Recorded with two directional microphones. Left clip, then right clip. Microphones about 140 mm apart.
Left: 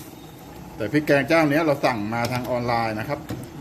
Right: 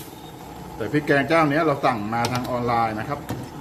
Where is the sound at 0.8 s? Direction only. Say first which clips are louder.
Left 1 dB; 65° left (ahead or behind).